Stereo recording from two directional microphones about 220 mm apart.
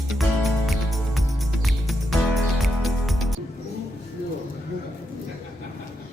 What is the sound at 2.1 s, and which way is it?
Music, centre (ahead or behind).